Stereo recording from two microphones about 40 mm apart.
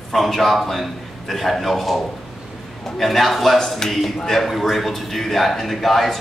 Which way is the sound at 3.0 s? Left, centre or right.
Centre.